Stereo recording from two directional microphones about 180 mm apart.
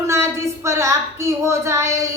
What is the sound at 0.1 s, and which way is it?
A woman's voice, 15° right (ahead or behind).